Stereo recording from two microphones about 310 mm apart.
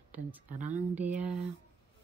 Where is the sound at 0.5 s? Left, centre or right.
Right.